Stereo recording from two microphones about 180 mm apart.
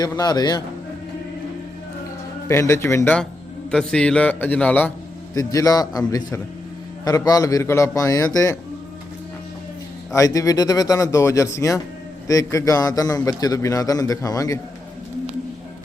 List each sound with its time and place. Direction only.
0.0 s a man's voice: 20° left (ahead or behind)
2.5 s a man's voice: 15° left (ahead or behind)
10.1 s a man's voice: 20° left (ahead or behind)